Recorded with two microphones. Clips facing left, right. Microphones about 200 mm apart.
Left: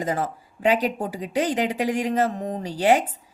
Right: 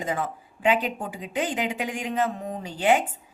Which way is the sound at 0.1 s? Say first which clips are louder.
Left 3 dB; 40° left (ahead or behind).